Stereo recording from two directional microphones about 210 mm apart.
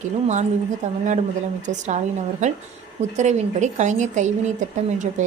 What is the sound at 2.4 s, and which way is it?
A woman's voice, 35° right (ahead or behind).